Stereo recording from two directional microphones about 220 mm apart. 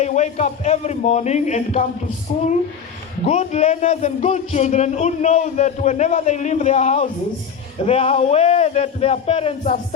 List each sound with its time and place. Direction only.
0.0 s a man's voice: 30° left (ahead or behind)